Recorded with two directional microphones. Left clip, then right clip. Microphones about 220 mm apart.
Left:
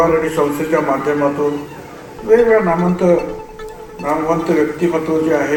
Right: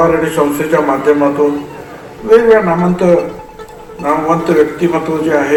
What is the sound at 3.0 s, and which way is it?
A man's voice, 25° right (ahead or behind).